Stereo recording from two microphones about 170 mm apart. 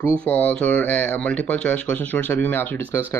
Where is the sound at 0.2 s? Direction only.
10° left (ahead or behind).